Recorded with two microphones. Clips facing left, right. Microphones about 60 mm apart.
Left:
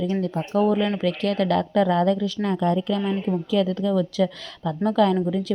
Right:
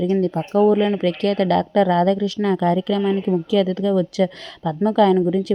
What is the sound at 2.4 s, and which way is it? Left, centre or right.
Speech, right.